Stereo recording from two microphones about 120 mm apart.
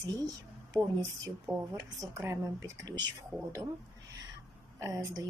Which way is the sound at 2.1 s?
25° right (ahead or behind).